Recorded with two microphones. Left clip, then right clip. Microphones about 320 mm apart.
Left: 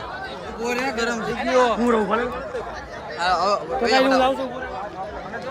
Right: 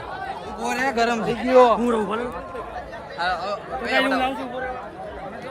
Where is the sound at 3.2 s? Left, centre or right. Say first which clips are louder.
Left 5 dB; centre.